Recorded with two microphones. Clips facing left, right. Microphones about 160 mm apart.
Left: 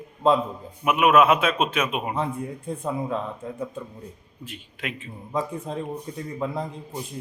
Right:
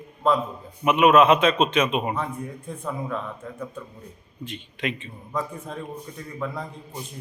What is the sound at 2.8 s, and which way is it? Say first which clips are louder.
Speech: left 2 dB; 25° left (ahead or behind).